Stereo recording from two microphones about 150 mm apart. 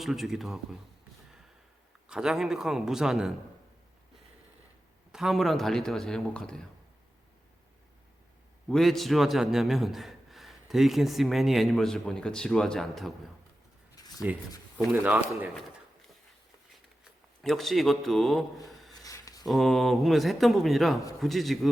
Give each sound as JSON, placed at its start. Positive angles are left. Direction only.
{"t": 0.0, "sound": "a man's voice", "side_deg": 0}
{"t": 2.0, "sound": "a man's voice", "side_deg": -5}
{"t": 5.1, "sound": "a man's voice", "side_deg": 0}
{"t": 8.7, "sound": "a man's voice", "side_deg": 0}
{"t": 13.9, "sound": "a sound", "side_deg": 25}
{"t": 14.9, "sound": "speech", "side_deg": -10}
{"t": 17.0, "sound": "a man's voice", "side_deg": 0}
{"t": 18.9, "sound": "a sound", "side_deg": 25}
{"t": 19.5, "sound": "a man's voice", "side_deg": 0}